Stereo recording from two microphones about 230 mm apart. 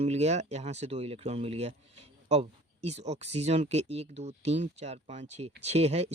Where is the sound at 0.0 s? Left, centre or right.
Right.